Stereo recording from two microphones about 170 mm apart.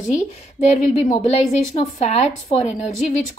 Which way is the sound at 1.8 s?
35° left (ahead or behind).